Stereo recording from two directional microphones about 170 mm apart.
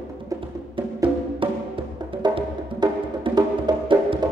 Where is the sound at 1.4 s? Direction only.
30° right (ahead or behind).